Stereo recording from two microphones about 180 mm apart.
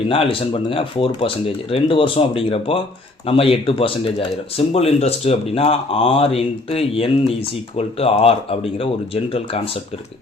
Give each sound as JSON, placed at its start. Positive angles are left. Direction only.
{"t": 0.1, "sound": "speech", "side_deg": 30}